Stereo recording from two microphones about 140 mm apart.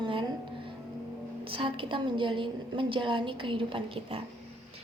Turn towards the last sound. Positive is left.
turn(degrees=-40)  # may be behind; listen again after turning